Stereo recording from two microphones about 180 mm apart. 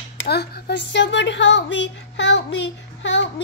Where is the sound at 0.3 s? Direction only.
60° left (ahead or behind).